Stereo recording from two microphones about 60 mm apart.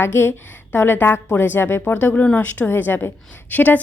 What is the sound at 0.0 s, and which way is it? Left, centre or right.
A woman's voice, left.